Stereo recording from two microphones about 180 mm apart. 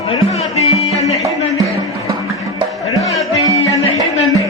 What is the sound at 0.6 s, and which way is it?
Music, 35° left (ahead or behind).